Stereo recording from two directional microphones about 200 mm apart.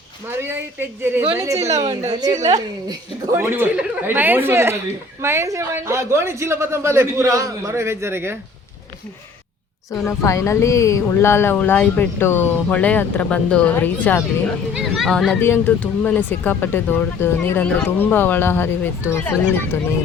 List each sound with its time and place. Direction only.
0.3 s a woman's voice: 10° right (ahead or behind)
1.6 s a woman's voice: 35° right (ahead or behind)
2.1 s a woman's voice: 20° right (ahead or behind)
10.1 s speech: 15° left (ahead or behind)